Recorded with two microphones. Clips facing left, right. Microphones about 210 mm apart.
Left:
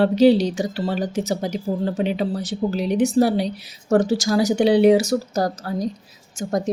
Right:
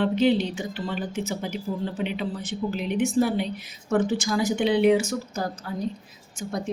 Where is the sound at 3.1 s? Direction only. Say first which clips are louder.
Left 4 dB; 75° left (ahead or behind).